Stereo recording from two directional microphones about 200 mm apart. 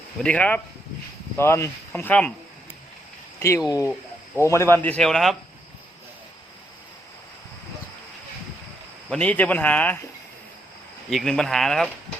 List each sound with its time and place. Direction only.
0.2 s speech: 5° left (ahead or behind)
3.7 s speech: 15° left (ahead or behind); by 5.4 s centre (ahead or behind)
9.0 s speech: 5° left (ahead or behind)
11.1 s speech: centre (ahead or behind)